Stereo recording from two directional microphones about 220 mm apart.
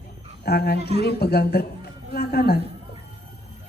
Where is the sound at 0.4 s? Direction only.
45° left (ahead or behind).